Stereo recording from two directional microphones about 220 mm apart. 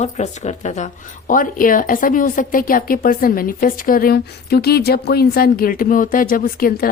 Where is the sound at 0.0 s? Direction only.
30° left (ahead or behind).